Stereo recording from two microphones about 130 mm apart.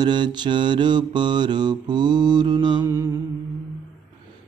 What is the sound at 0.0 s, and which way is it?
Mantra, 35° right (ahead or behind).